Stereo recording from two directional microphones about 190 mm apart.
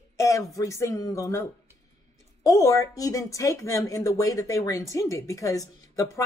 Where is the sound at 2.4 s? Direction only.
15° left (ahead or behind).